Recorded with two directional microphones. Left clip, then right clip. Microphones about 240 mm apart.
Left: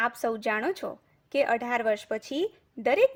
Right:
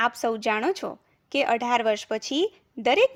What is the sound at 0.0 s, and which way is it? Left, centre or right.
A woman's voice, right.